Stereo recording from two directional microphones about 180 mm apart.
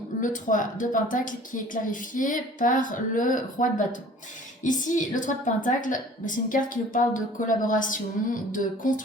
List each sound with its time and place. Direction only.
0.2 s a woman's voice: 45° left (ahead or behind)